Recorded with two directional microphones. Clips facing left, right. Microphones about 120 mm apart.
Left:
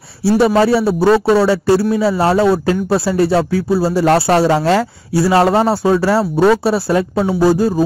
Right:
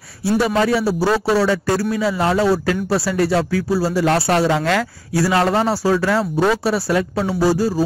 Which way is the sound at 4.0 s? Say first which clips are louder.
Left 5 dB; 35° left (ahead or behind).